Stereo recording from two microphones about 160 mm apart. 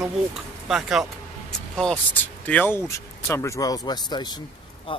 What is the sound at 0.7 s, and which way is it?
Speech, centre (ahead or behind).